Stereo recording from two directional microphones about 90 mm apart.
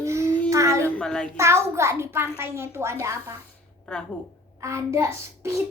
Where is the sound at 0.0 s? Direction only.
30° right (ahead or behind).